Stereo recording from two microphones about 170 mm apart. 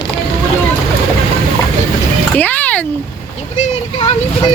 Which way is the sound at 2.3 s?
10° left (ahead or behind).